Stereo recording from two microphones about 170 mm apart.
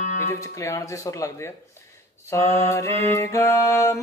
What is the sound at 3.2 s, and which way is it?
Music, 15° left (ahead or behind).